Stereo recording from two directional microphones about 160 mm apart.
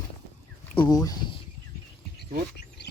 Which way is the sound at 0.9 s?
25° left (ahead or behind).